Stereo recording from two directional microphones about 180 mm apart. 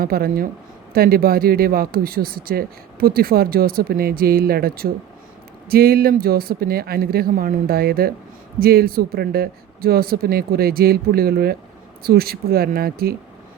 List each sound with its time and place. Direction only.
0.0 s speech: 55° right (ahead or behind)